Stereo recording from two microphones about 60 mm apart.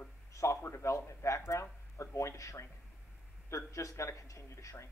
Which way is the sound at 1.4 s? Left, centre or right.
Left.